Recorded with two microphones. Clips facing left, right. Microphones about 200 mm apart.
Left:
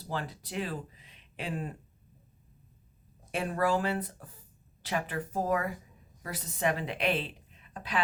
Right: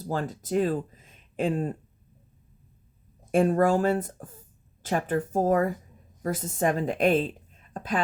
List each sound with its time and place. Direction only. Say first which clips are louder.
0.0 s speech: right 6 dB; 45° right (ahead or behind)
3.3 s a woman's voice: right 8 dB; 45° right (ahead or behind)